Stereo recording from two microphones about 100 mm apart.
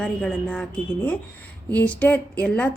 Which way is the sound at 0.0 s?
10° left (ahead or behind).